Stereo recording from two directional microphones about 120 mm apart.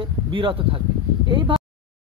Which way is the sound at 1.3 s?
45° right (ahead or behind).